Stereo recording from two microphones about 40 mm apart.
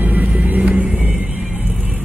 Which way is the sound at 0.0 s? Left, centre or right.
Right.